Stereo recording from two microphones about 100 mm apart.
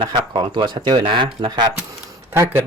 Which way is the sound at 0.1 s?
50° right (ahead or behind).